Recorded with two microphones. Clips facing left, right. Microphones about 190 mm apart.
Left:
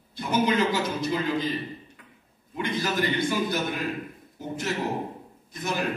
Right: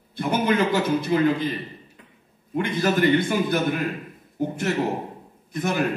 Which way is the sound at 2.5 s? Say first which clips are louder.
Right 5 dB; 55° right (ahead or behind).